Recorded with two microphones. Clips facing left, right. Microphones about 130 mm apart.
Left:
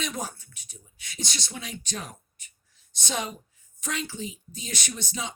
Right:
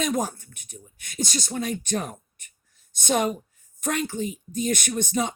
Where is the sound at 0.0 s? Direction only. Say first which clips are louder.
Right 8 dB; 45° right (ahead or behind).